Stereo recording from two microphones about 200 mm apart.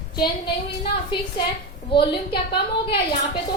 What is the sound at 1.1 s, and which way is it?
A woman's voice, 25° left (ahead or behind).